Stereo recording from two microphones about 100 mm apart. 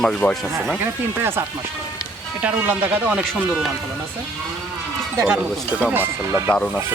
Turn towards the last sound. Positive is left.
turn(degrees=10)  # may be behind; listen again after turning